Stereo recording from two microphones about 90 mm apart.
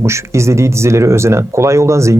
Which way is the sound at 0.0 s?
30° right (ahead or behind).